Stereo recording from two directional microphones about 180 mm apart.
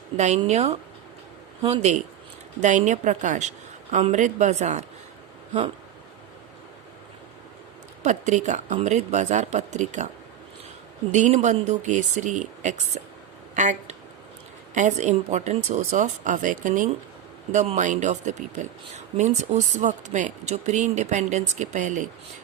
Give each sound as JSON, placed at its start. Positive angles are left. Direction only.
{"t": 0.2, "sound": "speech", "side_deg": -40}
{"t": 8.0, "sound": "speech", "side_deg": -40}
{"t": 11.1, "sound": "speech", "side_deg": -40}